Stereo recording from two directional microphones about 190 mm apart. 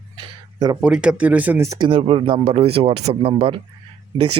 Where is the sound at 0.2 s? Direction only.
20° right (ahead or behind).